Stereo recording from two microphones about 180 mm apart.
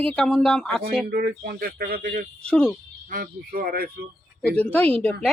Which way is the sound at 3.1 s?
55° right (ahead or behind).